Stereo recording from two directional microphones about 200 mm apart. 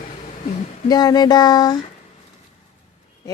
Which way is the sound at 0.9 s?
20° left (ahead or behind).